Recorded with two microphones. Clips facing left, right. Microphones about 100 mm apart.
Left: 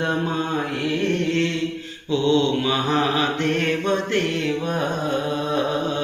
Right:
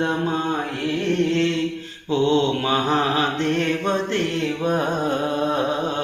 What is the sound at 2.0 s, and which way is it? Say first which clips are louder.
Mantra: even; 40° right (ahead or behind).